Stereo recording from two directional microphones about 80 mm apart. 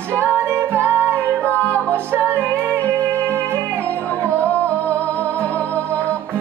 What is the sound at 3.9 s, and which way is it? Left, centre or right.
Music, centre.